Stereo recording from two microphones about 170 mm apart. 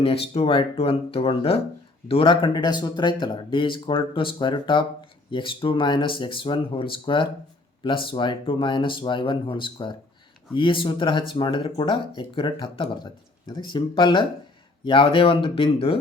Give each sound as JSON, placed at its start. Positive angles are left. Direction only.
{"t": 0.0, "sound": "speech", "side_deg": 35}